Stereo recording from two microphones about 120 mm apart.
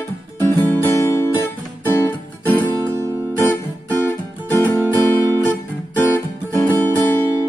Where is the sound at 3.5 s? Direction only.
15° left (ahead or behind).